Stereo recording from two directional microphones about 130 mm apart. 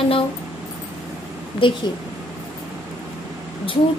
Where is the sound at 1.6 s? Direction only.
40° left (ahead or behind).